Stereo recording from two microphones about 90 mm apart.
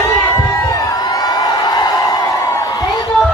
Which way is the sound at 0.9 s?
40° left (ahead or behind).